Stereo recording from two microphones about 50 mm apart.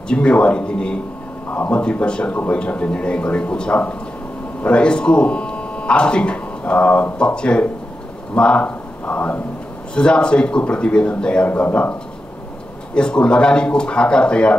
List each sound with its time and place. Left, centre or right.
0.1 s speech: left
1.5 s a sound: left
1.8 s speech: left
6.6 s a sound: left
7.2 s speech: left
9.9 s speech: centre
12.9 s speech: centre